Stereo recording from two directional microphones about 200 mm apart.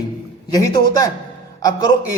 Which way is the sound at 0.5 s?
15° left (ahead or behind).